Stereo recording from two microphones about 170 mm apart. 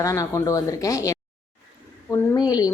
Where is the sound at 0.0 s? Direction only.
20° left (ahead or behind).